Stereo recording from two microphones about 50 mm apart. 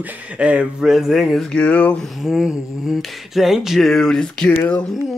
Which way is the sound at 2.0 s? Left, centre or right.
Centre.